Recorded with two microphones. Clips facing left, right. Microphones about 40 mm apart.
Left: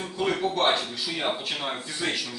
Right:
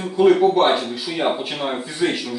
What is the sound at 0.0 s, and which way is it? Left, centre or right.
Speech, centre.